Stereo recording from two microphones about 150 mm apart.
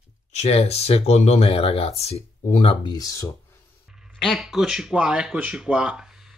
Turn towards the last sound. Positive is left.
turn(degrees=-5)  # may be behind; listen again after turning